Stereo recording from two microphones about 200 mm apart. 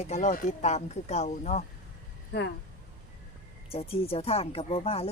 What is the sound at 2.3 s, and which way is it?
Speech, 60° left (ahead or behind).